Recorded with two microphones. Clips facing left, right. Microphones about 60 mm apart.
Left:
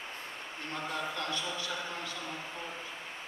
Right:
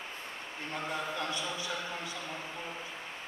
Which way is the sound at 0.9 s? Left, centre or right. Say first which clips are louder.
Even; centre.